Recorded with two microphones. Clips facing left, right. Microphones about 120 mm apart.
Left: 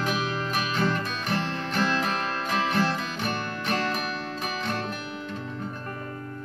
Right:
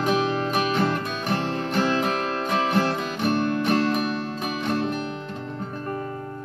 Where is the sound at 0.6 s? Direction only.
45° right (ahead or behind).